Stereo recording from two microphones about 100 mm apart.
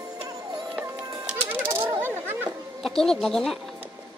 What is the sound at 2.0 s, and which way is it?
Chatter, 20° right (ahead or behind).